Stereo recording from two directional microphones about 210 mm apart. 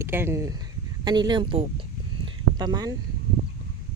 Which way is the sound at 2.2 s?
20° right (ahead or behind).